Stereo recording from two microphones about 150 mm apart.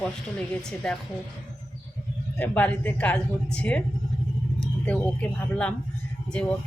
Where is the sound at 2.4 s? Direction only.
10° left (ahead or behind).